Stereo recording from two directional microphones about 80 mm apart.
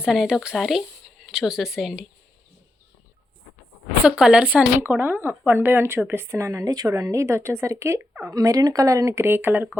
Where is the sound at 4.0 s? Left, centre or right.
Centre.